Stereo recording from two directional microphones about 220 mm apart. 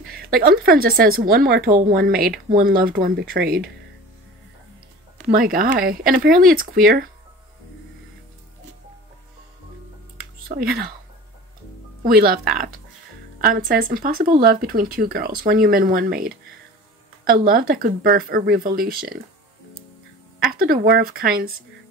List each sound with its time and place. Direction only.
0.0 s speech: 40° right (ahead or behind)
5.3 s speech: 40° right (ahead or behind)
10.5 s speech: 35° right (ahead or behind)
12.1 s speech: 45° right (ahead or behind)
20.3 s speech: 40° right (ahead or behind)